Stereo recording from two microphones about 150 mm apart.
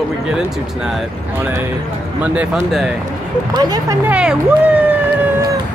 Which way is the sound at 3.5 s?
25° right (ahead or behind).